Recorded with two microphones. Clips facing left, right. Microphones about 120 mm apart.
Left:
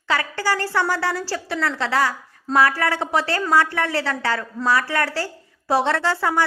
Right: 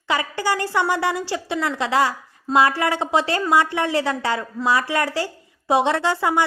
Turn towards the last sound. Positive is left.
turn(degrees=-20)  # may be behind; listen again after turning